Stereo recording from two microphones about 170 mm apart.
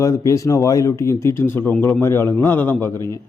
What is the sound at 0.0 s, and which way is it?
A man's voice, 20° left (ahead or behind).